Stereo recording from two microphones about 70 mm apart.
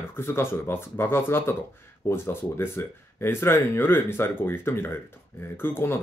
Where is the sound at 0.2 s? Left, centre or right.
Left.